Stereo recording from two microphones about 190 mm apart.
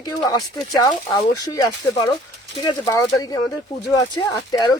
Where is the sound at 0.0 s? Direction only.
20° left (ahead or behind).